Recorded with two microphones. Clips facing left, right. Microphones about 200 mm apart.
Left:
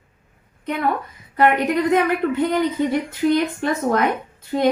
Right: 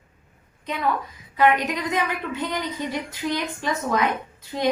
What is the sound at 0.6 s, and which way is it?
A woman's voice, 60° left (ahead or behind).